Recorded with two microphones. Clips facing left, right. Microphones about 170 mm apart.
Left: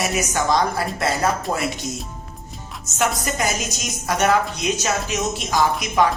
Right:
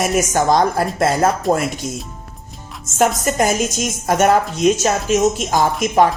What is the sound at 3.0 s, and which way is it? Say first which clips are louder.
Speech: right 6 dB; 50° right (ahead or behind).